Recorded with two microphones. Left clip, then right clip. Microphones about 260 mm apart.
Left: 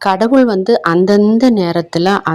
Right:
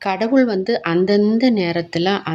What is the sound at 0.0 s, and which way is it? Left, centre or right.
Speech, left.